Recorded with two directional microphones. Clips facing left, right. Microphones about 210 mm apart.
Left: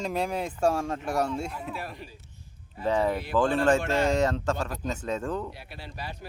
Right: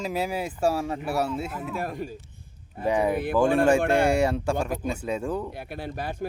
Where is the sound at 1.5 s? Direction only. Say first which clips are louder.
Right 5 dB; 45° right (ahead or behind).